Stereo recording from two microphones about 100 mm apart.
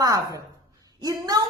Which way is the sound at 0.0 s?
35° right (ahead or behind).